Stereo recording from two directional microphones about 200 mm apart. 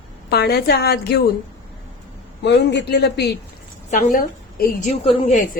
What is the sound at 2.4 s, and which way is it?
Speech, 60° left (ahead or behind).